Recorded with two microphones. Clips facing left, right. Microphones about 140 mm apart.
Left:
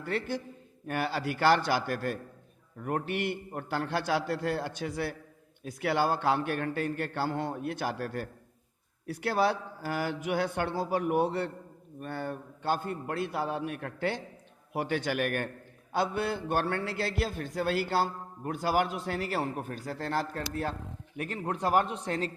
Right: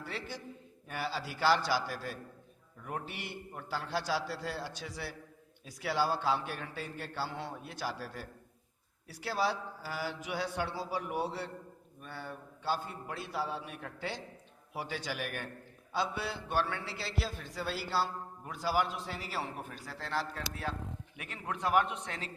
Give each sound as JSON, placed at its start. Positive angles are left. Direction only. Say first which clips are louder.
{"t": 0.0, "sound": "a man's voice", "louder": "left 9 dB", "side_deg": 55}